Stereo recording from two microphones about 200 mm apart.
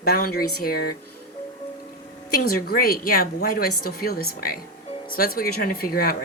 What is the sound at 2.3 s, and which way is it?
Speech, 45° left (ahead or behind).